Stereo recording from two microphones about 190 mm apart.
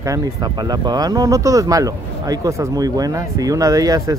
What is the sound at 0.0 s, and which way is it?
Speech, 20° right (ahead or behind).